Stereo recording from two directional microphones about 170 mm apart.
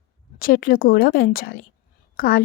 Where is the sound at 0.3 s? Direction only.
55° left (ahead or behind).